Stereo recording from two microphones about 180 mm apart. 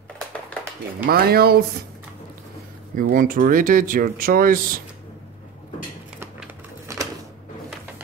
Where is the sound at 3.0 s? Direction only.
50° right (ahead or behind).